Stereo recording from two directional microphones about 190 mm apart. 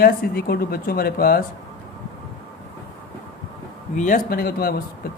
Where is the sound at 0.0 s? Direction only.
55° left (ahead or behind).